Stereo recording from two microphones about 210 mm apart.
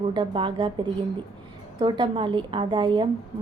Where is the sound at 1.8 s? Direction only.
25° right (ahead or behind).